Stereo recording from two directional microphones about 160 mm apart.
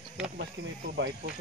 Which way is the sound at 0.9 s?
90° right.